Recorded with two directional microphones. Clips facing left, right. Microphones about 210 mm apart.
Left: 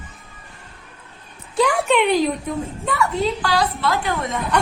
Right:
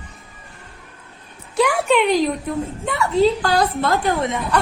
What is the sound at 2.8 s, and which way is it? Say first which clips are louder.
Speech: right 5 dB; 25° right (ahead or behind).